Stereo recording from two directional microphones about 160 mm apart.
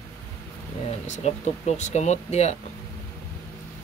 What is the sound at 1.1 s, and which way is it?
Speech, 45° left (ahead or behind).